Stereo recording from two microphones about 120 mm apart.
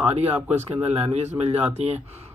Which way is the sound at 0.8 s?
60° right (ahead or behind).